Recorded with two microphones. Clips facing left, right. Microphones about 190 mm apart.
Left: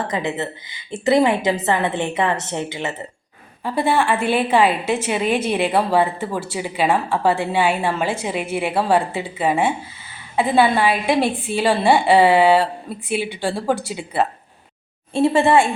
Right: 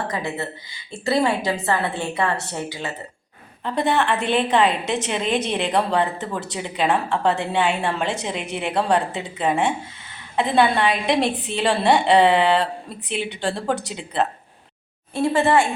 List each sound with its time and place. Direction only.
0.1 s a woman's voice: 20° left (ahead or behind)
3.6 s a woman's voice: 10° left (ahead or behind)
15.1 s a woman's voice: 25° left (ahead or behind)